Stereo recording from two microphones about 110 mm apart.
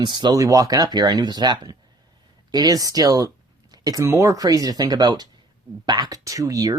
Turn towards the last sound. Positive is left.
turn(degrees=-35)  # may be behind; listen again after turning